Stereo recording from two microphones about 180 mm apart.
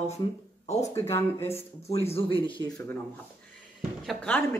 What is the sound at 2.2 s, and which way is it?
Speech, 30° left (ahead or behind).